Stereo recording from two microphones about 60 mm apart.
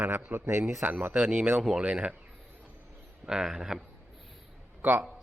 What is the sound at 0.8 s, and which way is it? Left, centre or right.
Speech, right.